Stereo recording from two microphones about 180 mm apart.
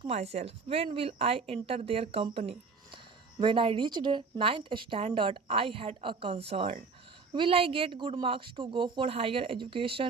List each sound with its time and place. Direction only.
0.0 s a woman's voice: 35° right (ahead or behind)